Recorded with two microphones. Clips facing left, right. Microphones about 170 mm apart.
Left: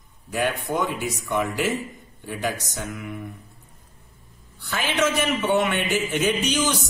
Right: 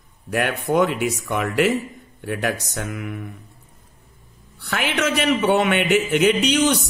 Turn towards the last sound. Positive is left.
turn(degrees=-65)  # may be behind; listen again after turning